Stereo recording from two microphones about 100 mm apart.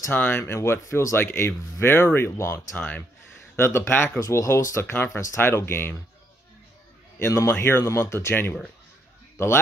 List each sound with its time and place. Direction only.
0.1 s speech: 20° left (ahead or behind)
7.2 s speech: 30° left (ahead or behind)